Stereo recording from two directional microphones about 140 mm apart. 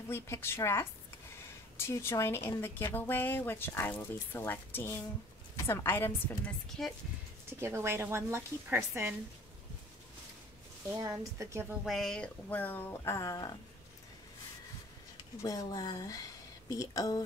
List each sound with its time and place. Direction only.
0.1 s speech: 15° left (ahead or behind)
7.4 s a woman's voice: 15° right (ahead or behind)
10.9 s a woman's voice: 20° right (ahead or behind)
11.8 s speech: centre (ahead or behind); by 13.5 s 25° left (ahead or behind)
15.4 s speech: 25° left (ahead or behind)